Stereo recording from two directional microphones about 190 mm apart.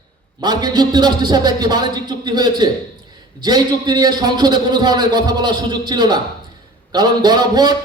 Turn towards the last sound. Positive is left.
turn(degrees=-20)  # may be behind; listen again after turning